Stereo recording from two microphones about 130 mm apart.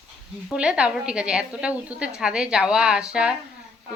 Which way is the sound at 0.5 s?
5° right (ahead or behind).